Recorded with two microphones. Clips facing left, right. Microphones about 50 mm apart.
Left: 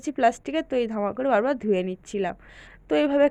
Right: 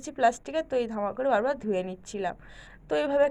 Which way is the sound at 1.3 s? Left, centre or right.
Left.